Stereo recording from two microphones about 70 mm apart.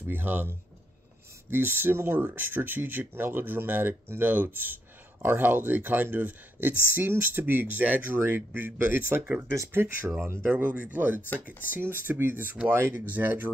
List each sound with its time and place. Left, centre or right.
0.1 s speech: right
10.5 s speech: right